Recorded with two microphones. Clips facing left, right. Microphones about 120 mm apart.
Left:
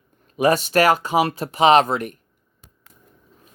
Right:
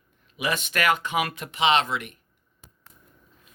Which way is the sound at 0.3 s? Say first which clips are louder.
Left 10 dB; 40° left (ahead or behind).